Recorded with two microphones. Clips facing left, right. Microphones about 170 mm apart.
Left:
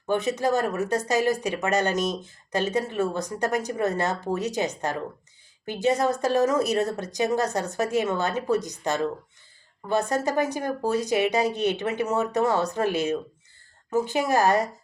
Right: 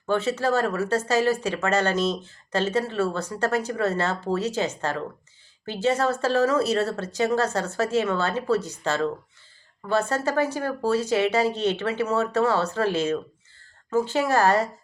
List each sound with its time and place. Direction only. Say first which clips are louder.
0.1 s a woman's voice: even; 15° left (ahead or behind)
10.1 s a woman's voice: even; 15° left (ahead or behind)